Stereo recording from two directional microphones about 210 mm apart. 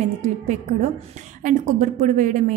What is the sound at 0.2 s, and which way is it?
A woman's voice, 35° right (ahead or behind).